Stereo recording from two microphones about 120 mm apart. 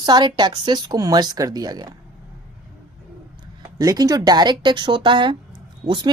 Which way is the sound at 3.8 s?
30° right (ahead or behind).